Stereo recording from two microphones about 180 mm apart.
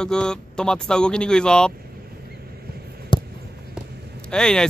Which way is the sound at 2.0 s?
60° right (ahead or behind).